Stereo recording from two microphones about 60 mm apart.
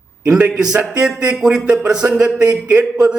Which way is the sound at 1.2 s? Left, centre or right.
Centre.